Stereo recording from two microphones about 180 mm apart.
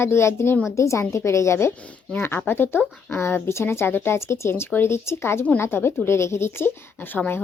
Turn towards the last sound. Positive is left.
turn(degrees=10)  # may be behind; listen again after turning